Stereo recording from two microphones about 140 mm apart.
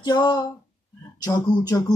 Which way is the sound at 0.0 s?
30° left (ahead or behind).